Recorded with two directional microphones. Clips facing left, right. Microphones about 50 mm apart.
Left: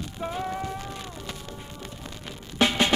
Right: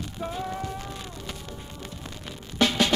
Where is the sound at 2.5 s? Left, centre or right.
Left.